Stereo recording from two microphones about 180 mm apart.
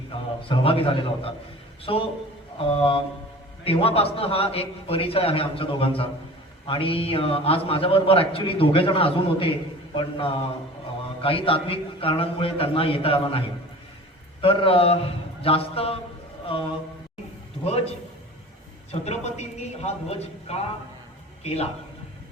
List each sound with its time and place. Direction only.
0.4 s a man's voice: 30° left (ahead or behind)
14.4 s a man's voice: 30° left (ahead or behind)
18.9 s a man's voice: 40° left (ahead or behind)